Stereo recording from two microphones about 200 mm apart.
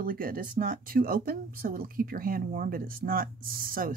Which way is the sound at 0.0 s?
45° right (ahead or behind).